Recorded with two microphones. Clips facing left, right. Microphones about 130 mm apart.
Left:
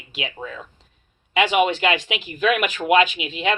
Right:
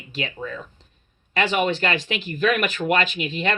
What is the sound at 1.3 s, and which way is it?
Speech, 10° left (ahead or behind).